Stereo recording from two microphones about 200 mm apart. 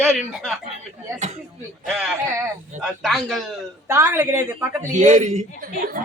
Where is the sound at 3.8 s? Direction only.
15° right (ahead or behind).